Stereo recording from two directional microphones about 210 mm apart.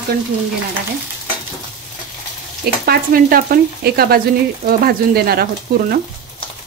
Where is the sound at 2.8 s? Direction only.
45° right (ahead or behind).